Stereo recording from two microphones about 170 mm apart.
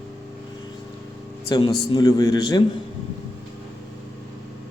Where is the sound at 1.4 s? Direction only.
20° left (ahead or behind).